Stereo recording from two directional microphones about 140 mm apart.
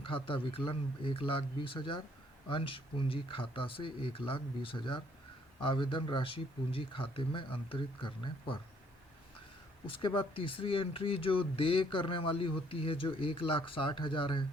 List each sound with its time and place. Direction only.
0.0 s speech: 40° left (ahead or behind)
9.8 s speech: 35° left (ahead or behind)